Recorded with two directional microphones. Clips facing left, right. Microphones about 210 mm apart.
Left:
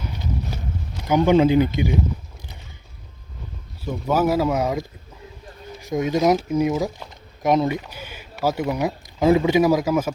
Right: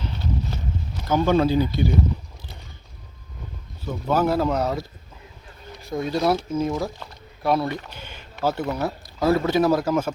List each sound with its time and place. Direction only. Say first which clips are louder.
1.0 s speech: left 3 dB; 15° left (ahead or behind)
3.8 s speech: left 1 dB; 10° left (ahead or behind)